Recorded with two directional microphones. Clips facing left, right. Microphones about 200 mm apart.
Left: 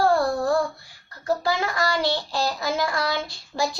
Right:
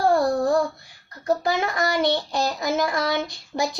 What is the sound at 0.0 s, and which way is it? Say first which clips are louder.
Child singing: right 1 dB; 20° right (ahead or behind).